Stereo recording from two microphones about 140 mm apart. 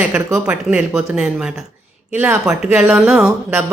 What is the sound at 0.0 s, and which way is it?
Speech, 15° right (ahead or behind).